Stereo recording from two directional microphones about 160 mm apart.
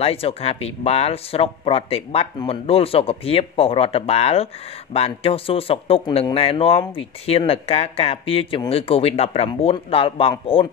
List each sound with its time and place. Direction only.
0.0 s speech: 40° left (ahead or behind)